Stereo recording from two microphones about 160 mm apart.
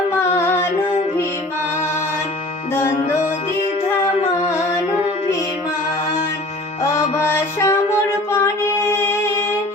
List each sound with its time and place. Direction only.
0.3 s music: 15° left (ahead or behind)
7.2 s music: 15° left (ahead or behind)